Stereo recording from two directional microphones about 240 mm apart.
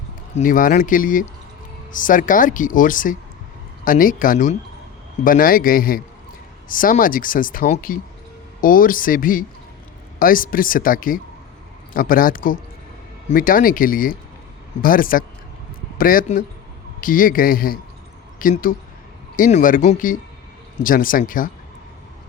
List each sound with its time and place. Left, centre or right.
0.3 s speech: left